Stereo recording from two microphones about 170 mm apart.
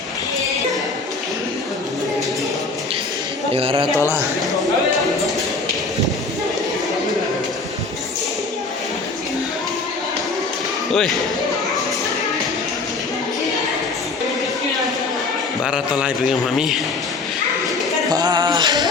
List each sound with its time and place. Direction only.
3.5 s a man's voice: 35° right (ahead or behind)
10.9 s speech: centre (ahead or behind)
15.6 s speech: 5° right (ahead or behind)
18.1 s music: 25° right (ahead or behind)